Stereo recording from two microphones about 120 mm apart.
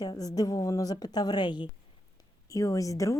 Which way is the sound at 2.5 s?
30° left (ahead or behind).